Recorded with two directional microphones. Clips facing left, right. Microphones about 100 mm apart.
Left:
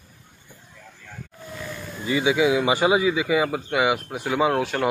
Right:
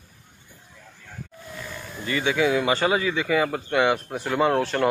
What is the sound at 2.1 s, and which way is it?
Speech, 15° left (ahead or behind).